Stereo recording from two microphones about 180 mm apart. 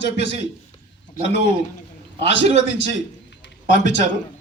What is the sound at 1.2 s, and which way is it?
Speech, 50° left (ahead or behind).